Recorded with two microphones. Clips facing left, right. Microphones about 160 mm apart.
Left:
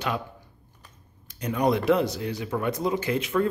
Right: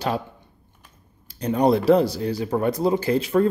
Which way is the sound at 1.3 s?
30° right (ahead or behind).